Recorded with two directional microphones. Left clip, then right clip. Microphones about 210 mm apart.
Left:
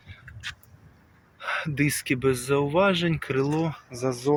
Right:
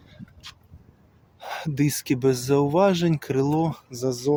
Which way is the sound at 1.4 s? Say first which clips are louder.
Left 1 dB; 25° right (ahead or behind).